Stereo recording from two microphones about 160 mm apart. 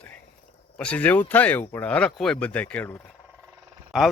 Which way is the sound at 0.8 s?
10° left (ahead or behind).